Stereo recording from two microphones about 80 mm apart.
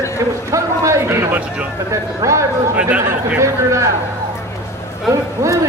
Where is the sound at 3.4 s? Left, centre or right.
Right.